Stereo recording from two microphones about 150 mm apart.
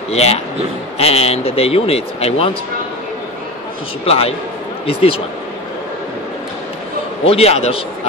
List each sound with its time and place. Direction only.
0.1 s speech: 45° left (ahead or behind)
4.0 s a man's voice: 40° left (ahead or behind)
7.2 s speech: 40° left (ahead or behind)